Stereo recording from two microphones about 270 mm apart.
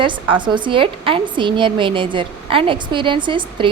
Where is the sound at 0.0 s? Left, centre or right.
Centre.